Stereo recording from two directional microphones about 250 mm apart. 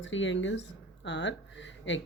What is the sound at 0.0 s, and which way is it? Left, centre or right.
Speech, left.